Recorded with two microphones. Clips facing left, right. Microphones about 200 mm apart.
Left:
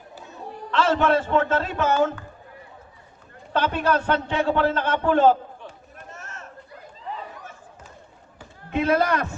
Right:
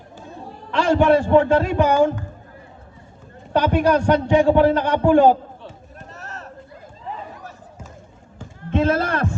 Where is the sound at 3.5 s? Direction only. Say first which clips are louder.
Right 5 dB; 15° right (ahead or behind).